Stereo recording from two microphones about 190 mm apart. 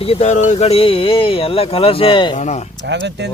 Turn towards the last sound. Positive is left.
turn(degrees=-65)  # may be behind; listen again after turning